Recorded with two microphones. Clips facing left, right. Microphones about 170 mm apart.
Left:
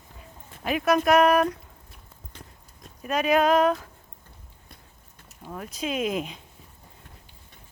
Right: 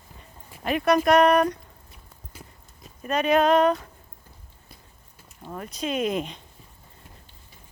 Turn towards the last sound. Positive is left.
turn(degrees=5)  # may be behind; listen again after turning